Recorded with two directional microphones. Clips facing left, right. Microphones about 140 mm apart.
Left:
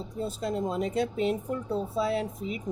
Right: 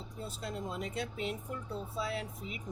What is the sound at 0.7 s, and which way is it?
Speech, 35° left (ahead or behind).